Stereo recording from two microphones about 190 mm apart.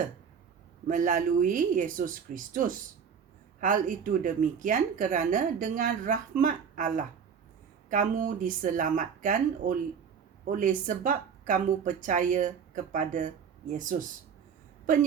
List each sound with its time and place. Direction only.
0.9 s speech: 45° right (ahead or behind)